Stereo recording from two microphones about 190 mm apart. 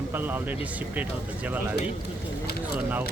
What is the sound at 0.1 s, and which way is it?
Speech, 10° right (ahead or behind).